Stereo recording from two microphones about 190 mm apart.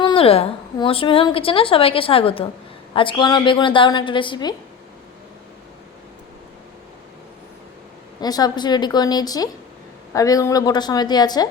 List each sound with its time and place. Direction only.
0.0 s a woman's voice: 30° left (ahead or behind)
8.2 s a woman's voice: 20° left (ahead or behind)